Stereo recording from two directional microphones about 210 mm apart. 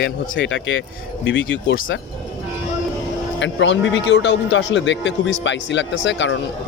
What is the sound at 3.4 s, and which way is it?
A man's voice, 60° left (ahead or behind).